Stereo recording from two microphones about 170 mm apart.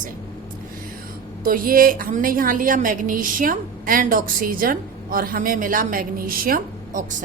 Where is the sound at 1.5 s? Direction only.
55° right (ahead or behind).